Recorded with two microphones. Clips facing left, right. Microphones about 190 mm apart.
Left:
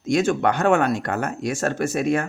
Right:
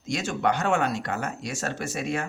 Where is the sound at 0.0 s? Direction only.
55° left (ahead or behind).